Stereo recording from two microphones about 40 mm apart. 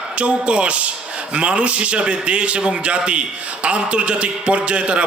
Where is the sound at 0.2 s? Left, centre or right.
Right.